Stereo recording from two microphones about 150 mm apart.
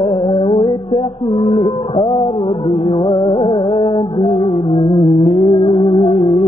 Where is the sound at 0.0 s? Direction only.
35° left (ahead or behind).